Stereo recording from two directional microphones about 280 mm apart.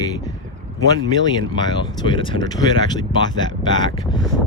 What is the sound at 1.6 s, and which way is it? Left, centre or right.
Speech, centre.